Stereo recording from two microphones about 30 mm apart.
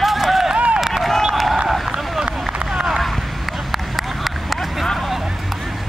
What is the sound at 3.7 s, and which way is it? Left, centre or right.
Run, centre.